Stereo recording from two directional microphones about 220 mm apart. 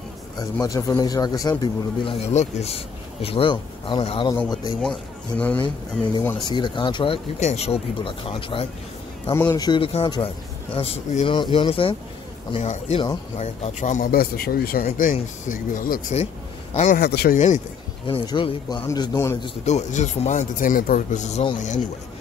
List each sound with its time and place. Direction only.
0.4 s a man's voice: 15° left (ahead or behind)
5.4 s speech: 5° left (ahead or behind)
6.1 s a man's voice: 20° left (ahead or behind)
9.3 s a man's voice: 10° left (ahead or behind)
13.4 s speech: 30° left (ahead or behind)
14.9 s speech: 35° left (ahead or behind)
17.0 s speech: 45° left (ahead or behind)
18.0 s a man's voice: 20° left (ahead or behind)
19.6 s speech: 30° left (ahead or behind)